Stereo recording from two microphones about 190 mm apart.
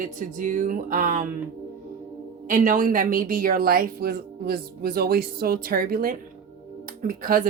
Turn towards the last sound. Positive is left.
turn(degrees=-50)  # may be behind; listen again after turning